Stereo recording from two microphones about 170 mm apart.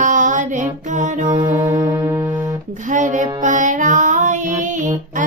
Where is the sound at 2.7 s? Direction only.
45° right (ahead or behind).